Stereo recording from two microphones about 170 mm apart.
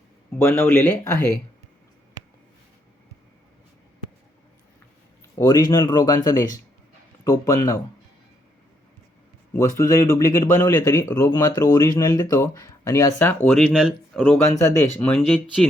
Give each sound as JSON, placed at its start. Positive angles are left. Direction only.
{"t": 0.3, "sound": "speech", "side_deg": 15}
{"t": 5.4, "sound": "speech", "side_deg": 20}
{"t": 9.5, "sound": "speech", "side_deg": 20}